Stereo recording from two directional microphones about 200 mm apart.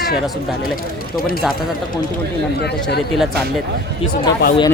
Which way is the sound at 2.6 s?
55° left (ahead or behind).